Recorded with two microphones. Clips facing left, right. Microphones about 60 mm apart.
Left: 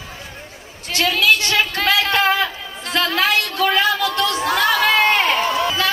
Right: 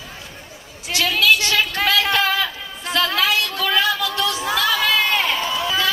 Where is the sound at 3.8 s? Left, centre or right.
Left.